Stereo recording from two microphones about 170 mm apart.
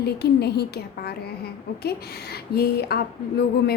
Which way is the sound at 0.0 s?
70° left (ahead or behind).